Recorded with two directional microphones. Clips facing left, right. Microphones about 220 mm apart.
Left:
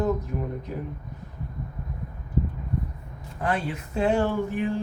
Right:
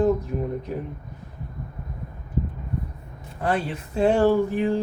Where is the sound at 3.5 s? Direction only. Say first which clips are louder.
Right 3 dB; 35° right (ahead or behind).